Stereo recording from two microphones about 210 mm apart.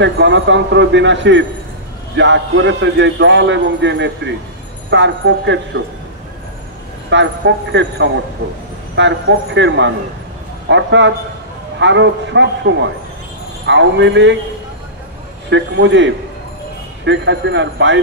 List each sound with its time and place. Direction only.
0.0 s speech: 60° right (ahead or behind)
7.1 s speech: 60° right (ahead or behind)
15.5 s speech: 60° right (ahead or behind)